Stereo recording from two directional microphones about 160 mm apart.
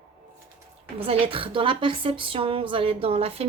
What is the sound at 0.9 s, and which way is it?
A woman's voice, 35° right (ahead or behind).